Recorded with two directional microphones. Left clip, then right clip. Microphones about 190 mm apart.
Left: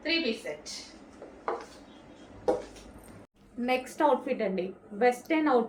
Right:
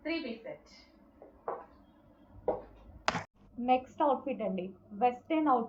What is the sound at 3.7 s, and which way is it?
A woman's voice, 30° left (ahead or behind).